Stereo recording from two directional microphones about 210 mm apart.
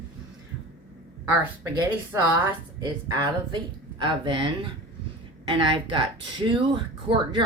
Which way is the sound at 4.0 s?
25° right (ahead or behind).